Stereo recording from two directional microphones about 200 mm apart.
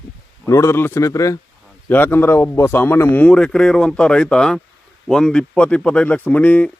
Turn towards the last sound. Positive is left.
turn(degrees=5)  # may be behind; listen again after turning